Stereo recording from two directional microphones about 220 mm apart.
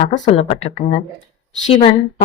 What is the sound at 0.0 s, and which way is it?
A woman's voice, 30° left (ahead or behind).